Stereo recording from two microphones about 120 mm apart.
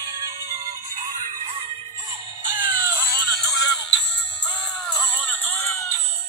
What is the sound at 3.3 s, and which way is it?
Music, centre (ahead or behind).